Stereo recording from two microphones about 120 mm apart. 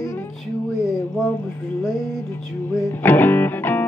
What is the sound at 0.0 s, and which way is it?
Music, 20° left (ahead or behind).